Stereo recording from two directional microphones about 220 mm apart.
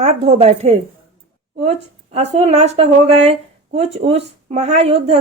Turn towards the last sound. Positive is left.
turn(degrees=-30)  # may be behind; listen again after turning